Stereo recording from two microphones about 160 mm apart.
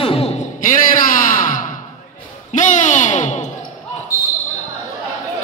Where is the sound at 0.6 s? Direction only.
55° left (ahead or behind).